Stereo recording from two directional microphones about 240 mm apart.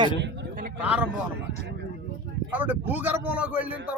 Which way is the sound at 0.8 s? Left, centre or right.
Centre.